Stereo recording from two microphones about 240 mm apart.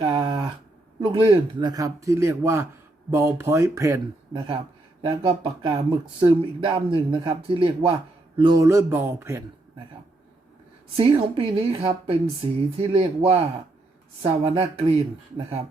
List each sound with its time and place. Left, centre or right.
0.0 s a sound: centre
1.0 s a man's voice: right
5.0 s a man's voice: right
10.9 s speech: right